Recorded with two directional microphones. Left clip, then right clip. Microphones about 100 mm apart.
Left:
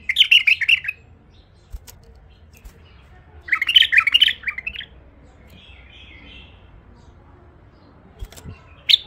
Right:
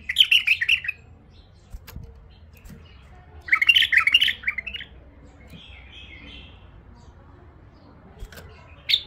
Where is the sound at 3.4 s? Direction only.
30° left (ahead or behind).